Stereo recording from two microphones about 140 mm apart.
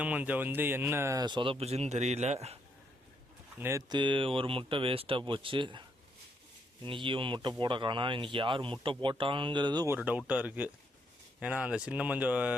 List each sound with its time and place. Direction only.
0.0 s speech: 10° right (ahead or behind); by 2.6 s 50° right (ahead or behind)
3.6 s speech: 20° right (ahead or behind)
3.9 s speech: 35° right (ahead or behind)
6.8 s speech: 35° right (ahead or behind)
9.8 s speech: 15° right (ahead or behind)